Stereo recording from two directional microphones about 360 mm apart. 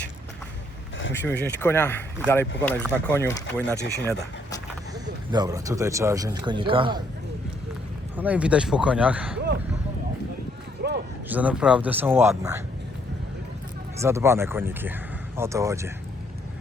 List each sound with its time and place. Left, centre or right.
1.1 s speech: centre
3.8 s speech: left
5.3 s speech: centre
8.1 s speech: centre
10.8 s a sound: right
11.3 s speech: centre
14.0 s speech: centre